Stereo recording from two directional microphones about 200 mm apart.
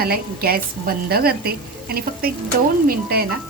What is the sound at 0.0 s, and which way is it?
A woman's voice, 50° right (ahead or behind).